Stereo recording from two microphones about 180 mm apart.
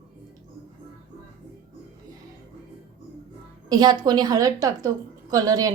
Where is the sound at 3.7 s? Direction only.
25° right (ahead or behind).